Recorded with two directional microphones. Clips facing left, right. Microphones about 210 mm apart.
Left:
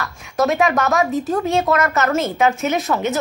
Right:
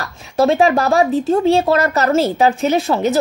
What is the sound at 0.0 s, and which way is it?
Speech, 30° right (ahead or behind).